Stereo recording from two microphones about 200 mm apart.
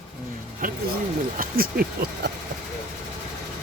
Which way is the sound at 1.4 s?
45° right (ahead or behind).